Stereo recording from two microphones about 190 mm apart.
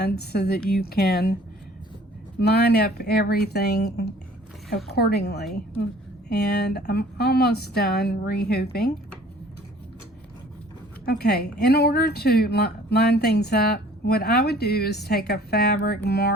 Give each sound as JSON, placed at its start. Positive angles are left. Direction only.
{"t": 0.0, "sound": "speech", "side_deg": 60}
{"t": 2.4, "sound": "speech", "side_deg": 60}
{"t": 11.0, "sound": "speech", "side_deg": 55}